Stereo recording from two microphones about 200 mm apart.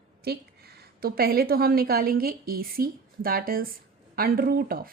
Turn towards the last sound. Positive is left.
turn(degrees=-45)  # may be behind; listen again after turning